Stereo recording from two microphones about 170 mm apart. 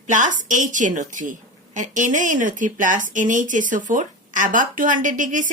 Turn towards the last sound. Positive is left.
turn(degrees=-50)  # may be behind; listen again after turning